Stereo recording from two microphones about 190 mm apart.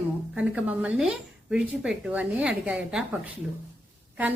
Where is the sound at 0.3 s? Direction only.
10° right (ahead or behind).